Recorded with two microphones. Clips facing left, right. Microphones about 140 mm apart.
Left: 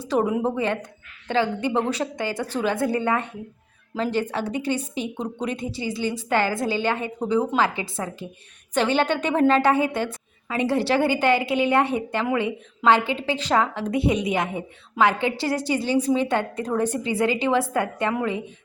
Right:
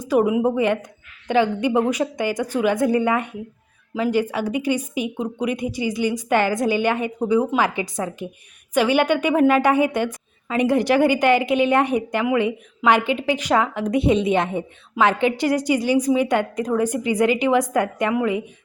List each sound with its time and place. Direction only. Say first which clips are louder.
0.0 s a woman's voice: right 4 dB; 10° right (ahead or behind)